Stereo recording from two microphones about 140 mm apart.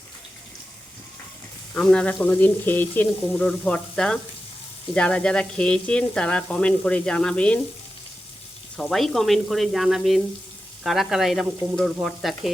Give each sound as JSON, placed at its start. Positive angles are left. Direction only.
{"t": 1.7, "sound": "speech", "side_deg": 5}
{"t": 8.7, "sound": "speech", "side_deg": 0}